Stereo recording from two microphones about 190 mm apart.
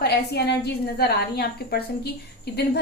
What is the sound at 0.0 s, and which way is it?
A woman's voice, 60° left (ahead or behind).